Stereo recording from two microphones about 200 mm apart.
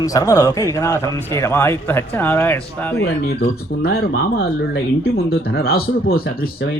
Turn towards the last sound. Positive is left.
turn(degrees=50)  # may be behind; listen again after turning